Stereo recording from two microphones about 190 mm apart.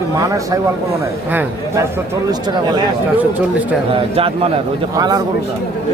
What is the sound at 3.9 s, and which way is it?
Speech, 30° right (ahead or behind).